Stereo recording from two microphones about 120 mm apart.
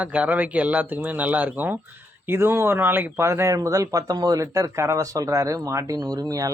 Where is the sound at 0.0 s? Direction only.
10° right (ahead or behind).